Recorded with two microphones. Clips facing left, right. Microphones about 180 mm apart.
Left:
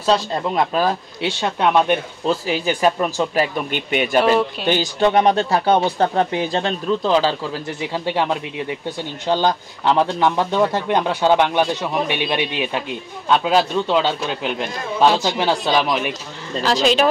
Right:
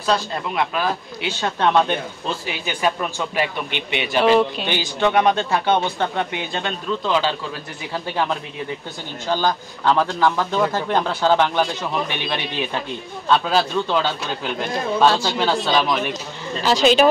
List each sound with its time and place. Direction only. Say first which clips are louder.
0.0 s speech: left 3 dB; 35° left (ahead or behind)
1.4 s a man's voice: left 1 dB; 10° left (ahead or behind)
2.2 s speech: left 7 dB; 35° left (ahead or behind)
4.2 s speech: right 3 dB; 5° left (ahead or behind)
4.6 s speech: left 4 dB; 40° left (ahead or behind)
7.9 s speech: left 2 dB; 25° left (ahead or behind)
13.3 s a man's voice: left 2 dB; 15° left (ahead or behind)
16.6 s speech: right 2 dB; centre (ahead or behind)